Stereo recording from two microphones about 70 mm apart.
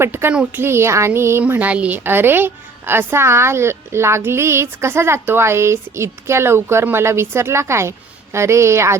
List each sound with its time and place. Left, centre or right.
0.0 s a woman's voice: right
2.0 s a woman's voice: right